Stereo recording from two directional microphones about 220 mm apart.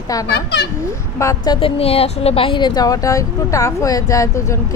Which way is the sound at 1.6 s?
25° left (ahead or behind).